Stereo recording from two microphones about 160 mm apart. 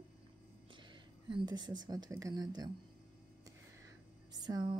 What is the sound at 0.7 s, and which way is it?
Speech, 30° right (ahead or behind).